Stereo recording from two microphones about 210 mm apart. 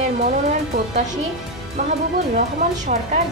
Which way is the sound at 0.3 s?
35° right (ahead or behind).